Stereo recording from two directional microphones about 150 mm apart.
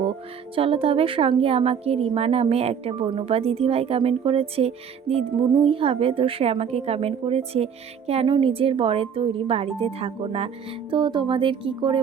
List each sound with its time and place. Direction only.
0.5 s a woman's voice: 35° right (ahead or behind)
10.9 s a woman's voice: 30° right (ahead or behind)